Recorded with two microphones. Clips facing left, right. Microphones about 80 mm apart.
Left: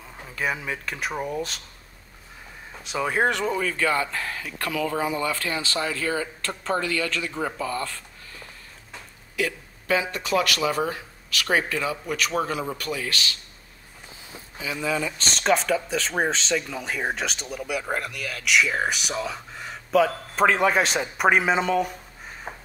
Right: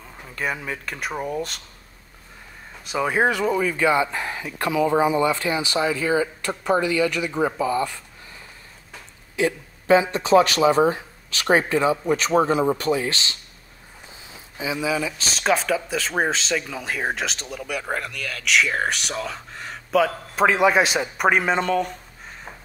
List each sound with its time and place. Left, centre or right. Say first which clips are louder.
0.0 s speech: even; centre
2.8 s speech: right 3 dB; centre
9.4 s speech: right 5 dB; right
14.6 s speech: right 3 dB; centre